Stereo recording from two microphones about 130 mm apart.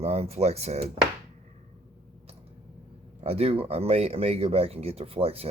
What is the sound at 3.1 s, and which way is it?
Speech, 50° right (ahead or behind).